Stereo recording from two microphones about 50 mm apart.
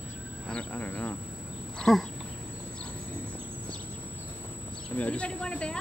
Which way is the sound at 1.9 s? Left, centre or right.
Centre.